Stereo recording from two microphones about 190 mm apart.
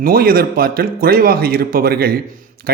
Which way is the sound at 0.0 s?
50° right (ahead or behind).